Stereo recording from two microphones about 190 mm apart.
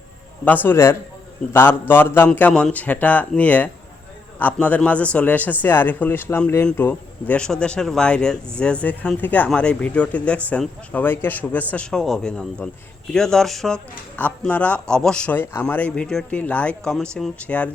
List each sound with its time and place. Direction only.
0.4 s speech: 10° left (ahead or behind)